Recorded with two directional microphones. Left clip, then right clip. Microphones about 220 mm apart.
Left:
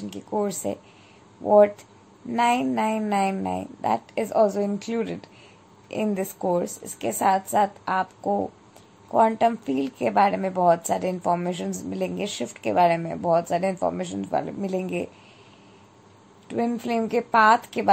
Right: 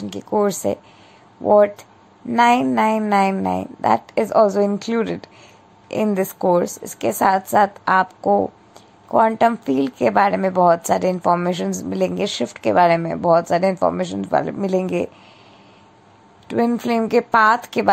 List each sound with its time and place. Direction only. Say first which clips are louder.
0.0 s a woman's voice: right 8 dB; 20° right (ahead or behind)
16.4 s a woman's voice: right 7 dB; 20° right (ahead or behind)